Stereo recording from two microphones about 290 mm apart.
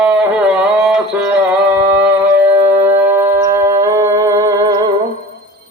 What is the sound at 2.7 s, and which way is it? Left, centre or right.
Music, centre.